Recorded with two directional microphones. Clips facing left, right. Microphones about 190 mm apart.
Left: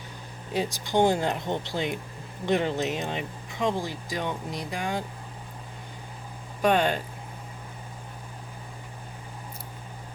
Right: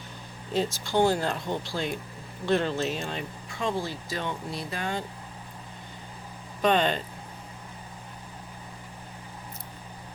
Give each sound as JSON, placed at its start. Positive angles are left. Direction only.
{"t": 0.5, "sound": "speech", "side_deg": 15}
{"t": 6.6, "sound": "speech", "side_deg": 10}